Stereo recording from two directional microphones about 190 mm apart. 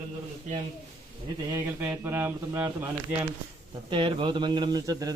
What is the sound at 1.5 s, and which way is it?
Speech, 10° right (ahead or behind).